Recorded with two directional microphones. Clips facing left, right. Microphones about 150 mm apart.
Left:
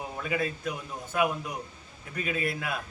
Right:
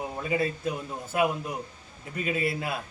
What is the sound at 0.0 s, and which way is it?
Speech, 25° right (ahead or behind).